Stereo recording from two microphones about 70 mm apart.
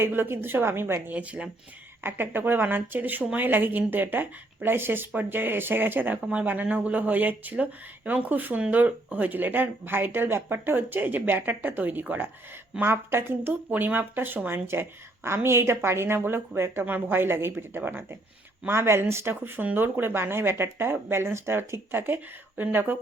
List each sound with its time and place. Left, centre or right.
0.0 s speech: right
1.1 s speech: centre
2.0 s speech: right